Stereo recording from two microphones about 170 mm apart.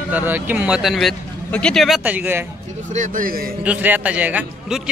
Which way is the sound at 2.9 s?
50° right (ahead or behind).